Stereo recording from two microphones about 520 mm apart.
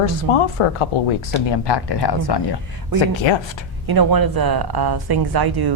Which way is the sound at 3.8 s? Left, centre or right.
Right.